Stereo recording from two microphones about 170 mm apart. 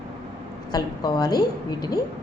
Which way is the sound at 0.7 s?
25° left (ahead or behind).